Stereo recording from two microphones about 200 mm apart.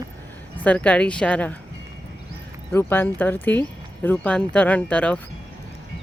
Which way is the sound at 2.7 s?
10° left (ahead or behind).